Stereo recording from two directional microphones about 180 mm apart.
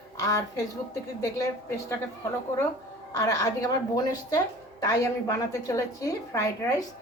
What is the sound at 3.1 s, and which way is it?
Speech, 20° left (ahead or behind).